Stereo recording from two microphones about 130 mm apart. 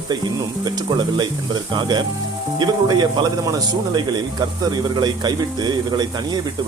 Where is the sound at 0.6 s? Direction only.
35° right (ahead or behind).